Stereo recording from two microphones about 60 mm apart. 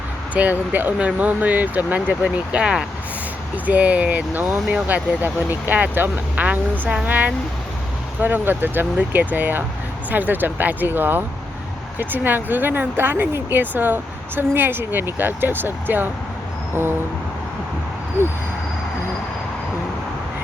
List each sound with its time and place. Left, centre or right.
0.4 s speech: right